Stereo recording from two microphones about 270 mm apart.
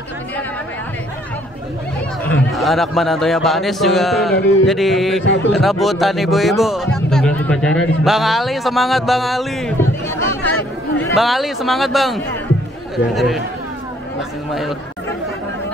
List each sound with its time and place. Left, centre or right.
2.2 s speech: centre
5.2 s a man's voice: left
5.5 s speech: centre